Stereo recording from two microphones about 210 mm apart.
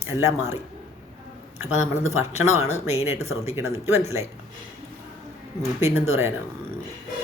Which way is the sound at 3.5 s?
10° right (ahead or behind).